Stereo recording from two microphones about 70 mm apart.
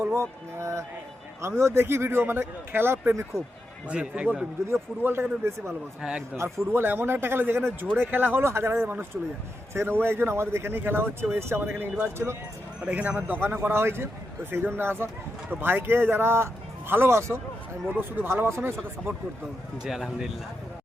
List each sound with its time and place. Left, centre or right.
0.0 s speech: right
3.8 s speech: centre
4.7 s speech: right
6.0 s speech: centre
6.3 s speech: right
9.7 s speech: right
12.8 s a man's voice: right
17.8 s speech: right
19.8 s speech: centre